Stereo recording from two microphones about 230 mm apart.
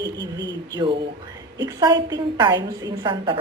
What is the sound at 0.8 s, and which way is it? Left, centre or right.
Speech, right.